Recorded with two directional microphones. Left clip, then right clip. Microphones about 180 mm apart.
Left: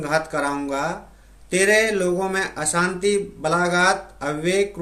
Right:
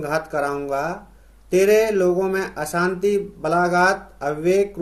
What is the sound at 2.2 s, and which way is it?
Speech, 40° left (ahead or behind).